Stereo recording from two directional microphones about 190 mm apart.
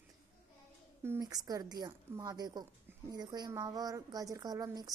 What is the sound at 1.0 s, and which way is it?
Speech, 15° right (ahead or behind).